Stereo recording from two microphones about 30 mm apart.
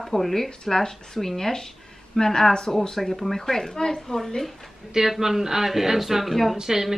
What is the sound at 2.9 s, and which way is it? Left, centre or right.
A woman's voice, centre.